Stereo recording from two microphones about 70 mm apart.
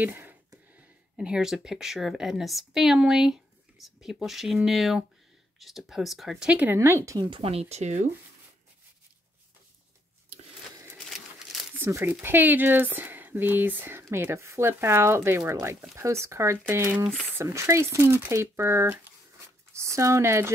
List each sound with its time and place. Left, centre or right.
0.0 s speech: right
1.1 s a woman's voice: centre
6.4 s speech: right
6.7 s speech: right
11.1 s a sound: centre
11.9 s speech: right
14.1 s speech: right